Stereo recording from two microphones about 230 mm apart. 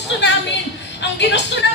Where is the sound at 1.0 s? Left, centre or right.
Left.